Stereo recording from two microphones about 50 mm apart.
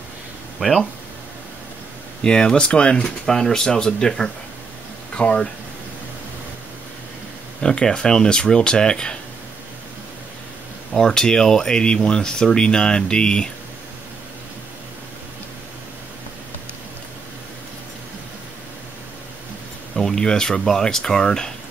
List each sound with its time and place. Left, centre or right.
0.6 s speech: centre
2.2 s speech: centre
3.0 s speech: centre
7.6 s speech: centre
10.9 s speech: centre
20.0 s speech: centre